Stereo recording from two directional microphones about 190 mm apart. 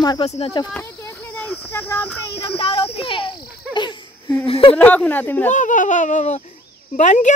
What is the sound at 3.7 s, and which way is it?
Laughter, 25° left (ahead or behind).